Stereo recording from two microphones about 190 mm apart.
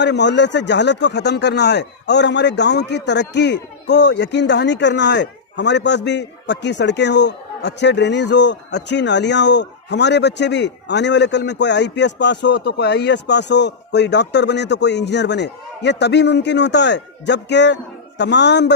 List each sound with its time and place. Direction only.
0.0 s speech: 65° left (ahead or behind)